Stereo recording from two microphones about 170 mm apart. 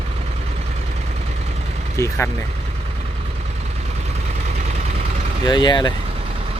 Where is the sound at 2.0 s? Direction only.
15° left (ahead or behind).